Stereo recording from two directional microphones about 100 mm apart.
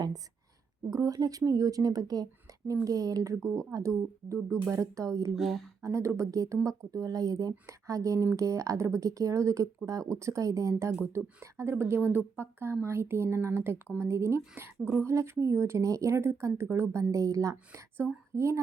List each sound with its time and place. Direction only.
0.9 s speech: 35° right (ahead or behind)
3.4 s speech: 5° left (ahead or behind)
3.7 s a woman's voice: 30° right (ahead or behind)
17.7 s a woman's voice: 25° right (ahead or behind)